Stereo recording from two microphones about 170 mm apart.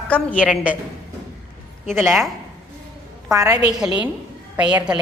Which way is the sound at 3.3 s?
20° right (ahead or behind).